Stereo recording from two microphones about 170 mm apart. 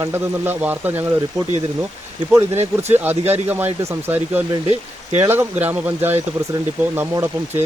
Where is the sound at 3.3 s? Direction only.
10° right (ahead or behind).